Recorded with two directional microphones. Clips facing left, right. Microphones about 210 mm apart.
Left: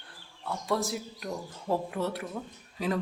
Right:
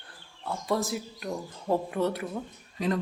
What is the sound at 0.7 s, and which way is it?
Speech, centre (ahead or behind).